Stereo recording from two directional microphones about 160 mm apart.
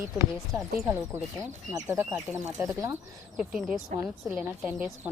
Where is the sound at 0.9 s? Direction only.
15° right (ahead or behind).